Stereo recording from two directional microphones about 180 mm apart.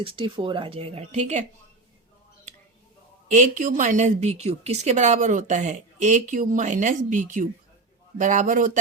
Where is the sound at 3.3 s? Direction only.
45° right (ahead or behind).